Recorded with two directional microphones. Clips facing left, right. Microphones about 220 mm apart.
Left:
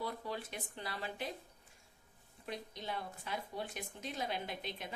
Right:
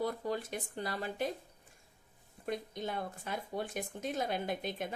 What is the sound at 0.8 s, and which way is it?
Speech, 45° right (ahead or behind).